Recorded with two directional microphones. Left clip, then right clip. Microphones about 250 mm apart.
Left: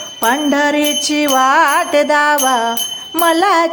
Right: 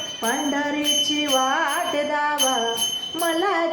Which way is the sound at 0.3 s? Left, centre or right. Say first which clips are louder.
Left 11 dB; left.